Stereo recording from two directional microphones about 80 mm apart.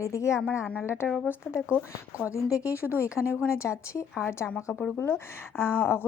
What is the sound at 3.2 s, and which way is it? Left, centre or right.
Speech, left.